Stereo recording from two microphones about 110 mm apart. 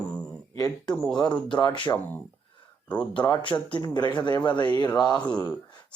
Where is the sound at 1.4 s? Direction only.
40° left (ahead or behind).